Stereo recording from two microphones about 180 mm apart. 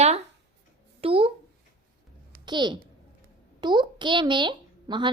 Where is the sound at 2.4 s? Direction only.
25° right (ahead or behind).